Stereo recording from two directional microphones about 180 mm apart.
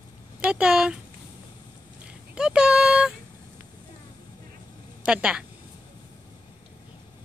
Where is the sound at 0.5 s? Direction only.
5° right (ahead or behind).